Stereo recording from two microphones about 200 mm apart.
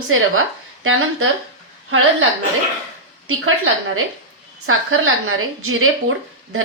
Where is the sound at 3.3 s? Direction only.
90° right.